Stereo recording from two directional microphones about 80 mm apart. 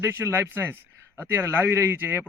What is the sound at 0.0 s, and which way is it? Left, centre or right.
A man's voice, right.